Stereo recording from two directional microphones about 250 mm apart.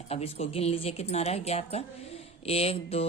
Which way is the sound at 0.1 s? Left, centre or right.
Left.